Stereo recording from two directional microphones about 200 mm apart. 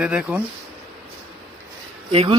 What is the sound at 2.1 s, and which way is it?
Speech, 30° right (ahead or behind).